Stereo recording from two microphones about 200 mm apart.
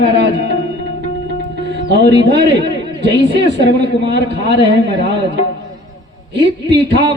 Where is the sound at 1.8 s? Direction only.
55° right (ahead or behind).